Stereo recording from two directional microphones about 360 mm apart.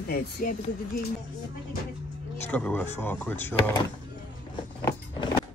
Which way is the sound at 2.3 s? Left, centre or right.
Centre.